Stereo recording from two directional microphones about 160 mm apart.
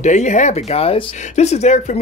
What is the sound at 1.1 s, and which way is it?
Speech, 45° left (ahead or behind).